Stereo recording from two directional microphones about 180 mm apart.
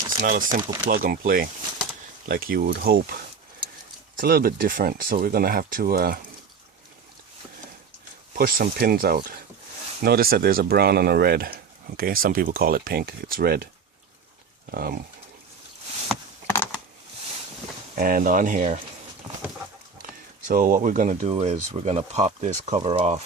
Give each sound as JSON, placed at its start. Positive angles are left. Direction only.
{"t": 0.2, "sound": "speech", "side_deg": -50}
{"t": 4.2, "sound": "speech", "side_deg": -55}
{"t": 8.4, "sound": "speech", "side_deg": -55}
{"t": 14.7, "sound": "speech", "side_deg": -55}
{"t": 16.5, "sound": "a sound", "side_deg": 10}
{"t": 17.9, "sound": "speech", "side_deg": -50}
{"t": 20.5, "sound": "speech", "side_deg": -50}